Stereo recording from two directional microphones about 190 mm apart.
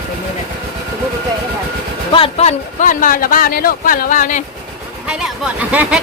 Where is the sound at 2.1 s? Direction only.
30° left (ahead or behind).